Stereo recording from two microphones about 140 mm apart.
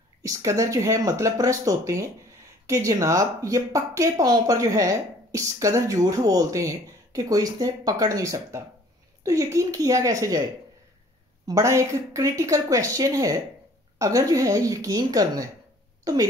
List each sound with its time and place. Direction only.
0.2 s speech: 25° right (ahead or behind)
11.4 s speech: 25° right (ahead or behind)